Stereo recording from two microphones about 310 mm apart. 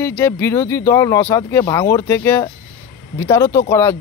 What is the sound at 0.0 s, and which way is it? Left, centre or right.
Speech, centre.